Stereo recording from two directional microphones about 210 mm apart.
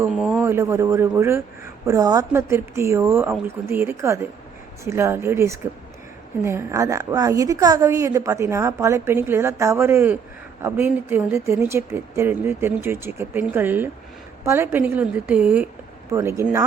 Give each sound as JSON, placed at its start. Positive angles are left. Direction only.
{"t": 0.0, "sound": "a woman's voice", "side_deg": -5}